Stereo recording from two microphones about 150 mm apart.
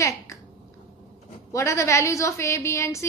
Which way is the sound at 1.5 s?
20° left (ahead or behind).